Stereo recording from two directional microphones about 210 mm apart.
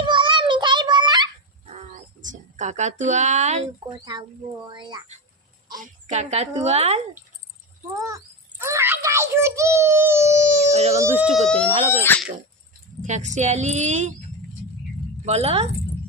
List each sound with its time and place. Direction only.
0.0 s a sound: 20° right (ahead or behind)
2.3 s speech: 35° right (ahead or behind)
4.0 s speech: 20° right (ahead or behind)
5.8 s a child's voice: 30° right (ahead or behind)
8.0 s a child's voice: 15° right (ahead or behind)
10.7 s a child's voice: 30° right (ahead or behind)
11.0 s speech: 10° right (ahead or behind)
11.4 s speech: 5° left (ahead or behind)
13.0 s a child's voice: 35° right (ahead or behind)
15.2 s speech: 30° right (ahead or behind)